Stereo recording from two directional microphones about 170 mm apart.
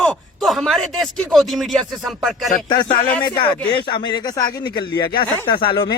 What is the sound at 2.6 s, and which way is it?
Speech, 25° left (ahead or behind).